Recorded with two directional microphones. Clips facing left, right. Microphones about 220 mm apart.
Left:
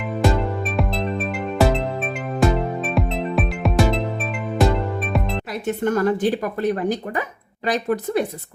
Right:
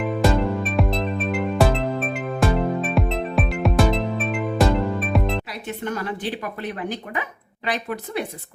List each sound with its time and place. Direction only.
0.2 s music: centre (ahead or behind)
5.6 s speech: 45° left (ahead or behind)